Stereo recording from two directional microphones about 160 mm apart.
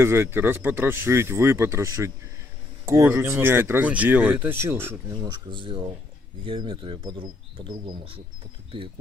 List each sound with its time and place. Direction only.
0.0 s speech: 15° right (ahead or behind); by 8.2 s 30° right (ahead or behind)